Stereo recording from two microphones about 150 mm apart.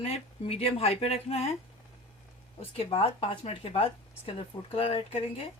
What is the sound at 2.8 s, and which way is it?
Speech, 40° left (ahead or behind).